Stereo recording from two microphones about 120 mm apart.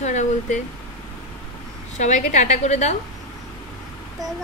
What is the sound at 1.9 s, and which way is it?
A woman's voice, 85° left.